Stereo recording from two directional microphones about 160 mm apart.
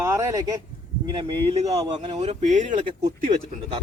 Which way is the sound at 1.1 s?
30° right (ahead or behind).